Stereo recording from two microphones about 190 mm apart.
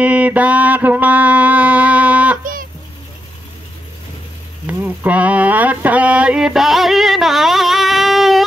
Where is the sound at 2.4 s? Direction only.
45° right (ahead or behind).